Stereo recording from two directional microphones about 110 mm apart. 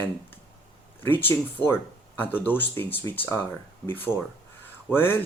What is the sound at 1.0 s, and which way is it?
Speech, 20° left (ahead or behind).